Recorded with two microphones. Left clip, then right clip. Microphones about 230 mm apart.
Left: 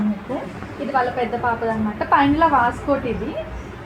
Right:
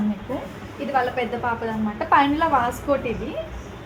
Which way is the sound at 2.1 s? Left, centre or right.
Centre.